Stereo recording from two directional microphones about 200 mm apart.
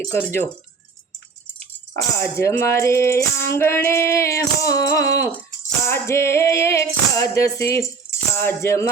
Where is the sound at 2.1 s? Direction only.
15° left (ahead or behind).